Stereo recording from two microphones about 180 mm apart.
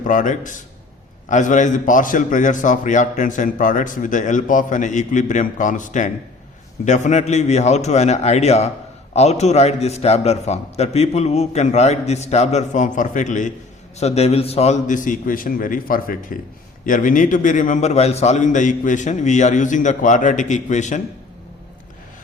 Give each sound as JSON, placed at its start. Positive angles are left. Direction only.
{"t": 0.0, "sound": "a man's voice", "side_deg": 45}